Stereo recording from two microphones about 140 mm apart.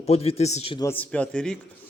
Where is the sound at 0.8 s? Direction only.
10° left (ahead or behind).